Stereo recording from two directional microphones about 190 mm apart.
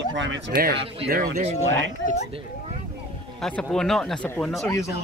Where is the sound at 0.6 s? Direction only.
50° right (ahead or behind).